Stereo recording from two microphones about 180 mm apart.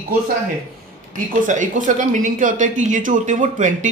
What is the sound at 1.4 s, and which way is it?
Speech, 45° right (ahead or behind).